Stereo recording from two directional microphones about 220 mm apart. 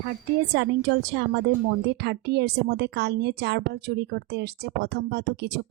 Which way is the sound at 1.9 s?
50° right (ahead or behind).